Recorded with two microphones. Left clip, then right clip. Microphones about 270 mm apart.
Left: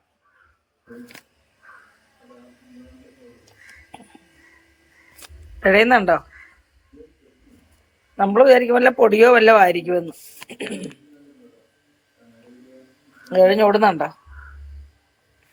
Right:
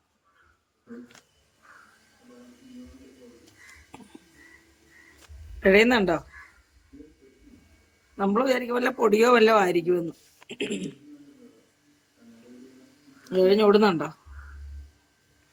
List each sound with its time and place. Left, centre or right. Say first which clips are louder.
5.6 s speech: left 5 dB; centre
8.2 s a man's voice: left 12 dB; left
10.5 s a sound: left 1 dB; centre
13.2 s speech: left 6 dB; centre